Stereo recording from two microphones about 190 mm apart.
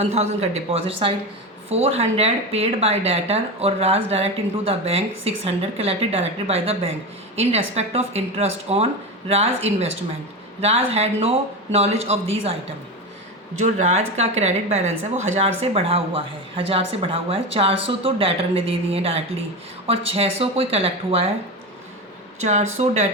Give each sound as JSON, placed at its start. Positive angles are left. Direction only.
{"t": 0.0, "sound": "speech", "side_deg": -35}
{"t": 13.6, "sound": "speech", "side_deg": -40}
{"t": 22.4, "sound": "speech", "side_deg": -35}